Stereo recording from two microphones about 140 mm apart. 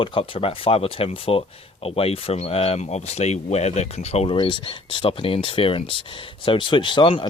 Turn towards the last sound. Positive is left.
turn(degrees=35)  # may be behind; listen again after turning